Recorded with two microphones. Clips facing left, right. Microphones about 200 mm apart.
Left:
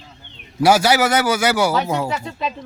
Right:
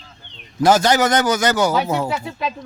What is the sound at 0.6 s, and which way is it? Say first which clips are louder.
A man's voice: even; 10° left (ahead or behind).